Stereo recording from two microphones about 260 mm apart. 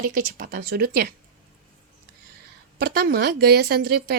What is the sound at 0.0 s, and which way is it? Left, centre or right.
A woman's voice, right.